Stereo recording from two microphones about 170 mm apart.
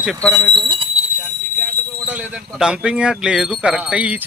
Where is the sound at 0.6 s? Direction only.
30° right (ahead or behind).